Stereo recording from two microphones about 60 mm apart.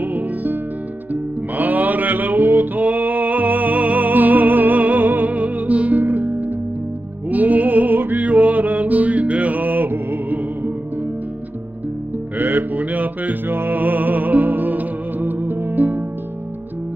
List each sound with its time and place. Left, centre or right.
0.0 s music: right
12.4 s mantra: right